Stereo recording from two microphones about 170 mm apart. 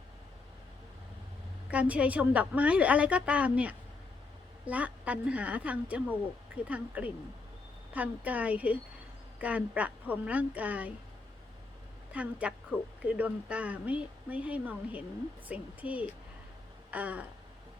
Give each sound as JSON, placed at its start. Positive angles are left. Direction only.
{"t": 1.7, "sound": "a woman's voice", "side_deg": -10}
{"t": 12.1, "sound": "a woman's voice", "side_deg": -5}